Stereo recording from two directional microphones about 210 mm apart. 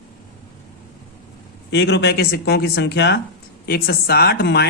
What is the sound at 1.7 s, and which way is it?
Speech, 55° left (ahead or behind).